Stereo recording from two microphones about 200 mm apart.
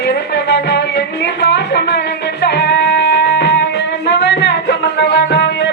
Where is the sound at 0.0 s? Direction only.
55° left (ahead or behind).